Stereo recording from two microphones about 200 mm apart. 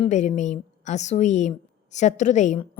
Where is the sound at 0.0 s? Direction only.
35° left (ahead or behind).